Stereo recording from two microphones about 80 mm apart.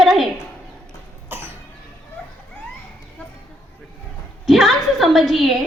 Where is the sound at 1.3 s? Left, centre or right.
Right.